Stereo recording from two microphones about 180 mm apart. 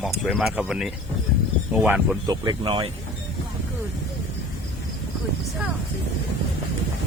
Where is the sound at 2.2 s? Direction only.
20° right (ahead or behind).